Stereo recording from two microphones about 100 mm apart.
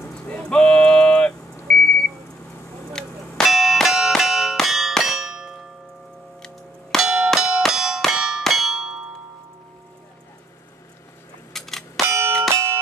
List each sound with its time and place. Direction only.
0.1 s a sound: 10° left (ahead or behind)
1.7 s beep: 10° left (ahead or behind)
2.9 s music: 5° left (ahead or behind)
7.0 s clang: 5° right (ahead or behind)
11.5 s clang: 5° left (ahead or behind)
12.1 s a sound: 25° right (ahead or behind)